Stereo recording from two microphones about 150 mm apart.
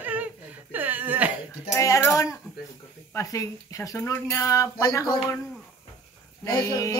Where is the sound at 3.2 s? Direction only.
20° left (ahead or behind).